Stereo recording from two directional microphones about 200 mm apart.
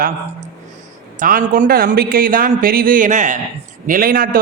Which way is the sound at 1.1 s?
45° right (ahead or behind).